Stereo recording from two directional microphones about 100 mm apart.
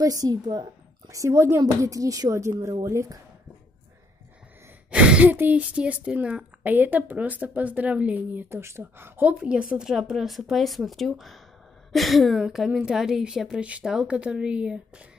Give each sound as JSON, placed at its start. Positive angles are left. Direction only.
{"t": 0.0, "sound": "a woman's voice", "side_deg": -35}
{"t": 4.9, "sound": "speech", "side_deg": -10}